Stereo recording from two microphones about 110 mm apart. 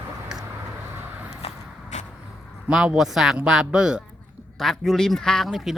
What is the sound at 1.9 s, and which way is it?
Vehicle, 90° left.